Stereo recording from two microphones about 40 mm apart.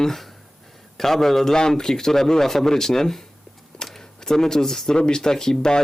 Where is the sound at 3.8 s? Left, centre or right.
Centre.